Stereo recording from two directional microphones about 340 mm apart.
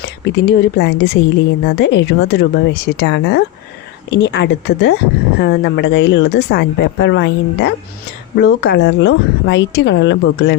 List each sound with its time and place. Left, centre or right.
0.0 s a woman's voice: left